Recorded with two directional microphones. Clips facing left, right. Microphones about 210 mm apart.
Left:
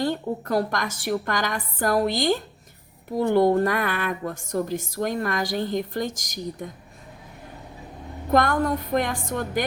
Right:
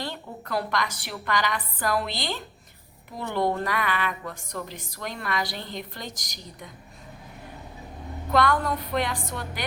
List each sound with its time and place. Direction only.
0.0 s a woman's voice: 45° left (ahead or behind)
8.3 s a woman's voice: 45° left (ahead or behind)